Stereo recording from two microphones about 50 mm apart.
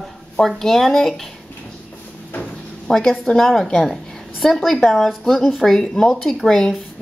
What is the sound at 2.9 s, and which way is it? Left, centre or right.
A woman's voice, centre.